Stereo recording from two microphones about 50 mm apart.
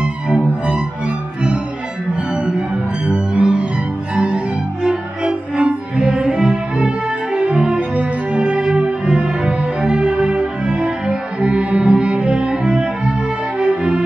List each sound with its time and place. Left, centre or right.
3.1 s cello: right
4.1 s music: centre
4.8 s cello: centre
7.3 s music: right